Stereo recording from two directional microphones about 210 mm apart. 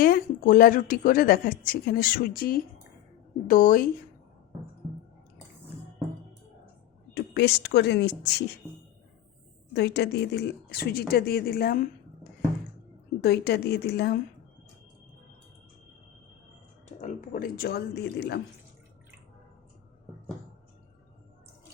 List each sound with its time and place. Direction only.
0.0 s a woman's voice: 45° left (ahead or behind)
7.1 s a woman's voice: 50° left (ahead or behind)
9.7 s a woman's voice: 55° left (ahead or behind)
17.0 s a woman's voice: 35° left (ahead or behind)